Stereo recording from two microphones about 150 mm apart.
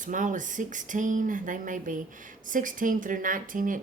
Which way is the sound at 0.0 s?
60° right (ahead or behind).